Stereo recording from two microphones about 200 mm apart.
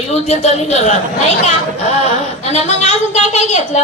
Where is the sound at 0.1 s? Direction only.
35° left (ahead or behind).